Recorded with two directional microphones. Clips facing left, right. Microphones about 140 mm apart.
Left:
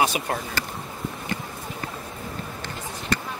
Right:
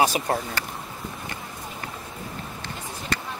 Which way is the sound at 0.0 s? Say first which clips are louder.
Right 2 dB; 35° right (ahead or behind).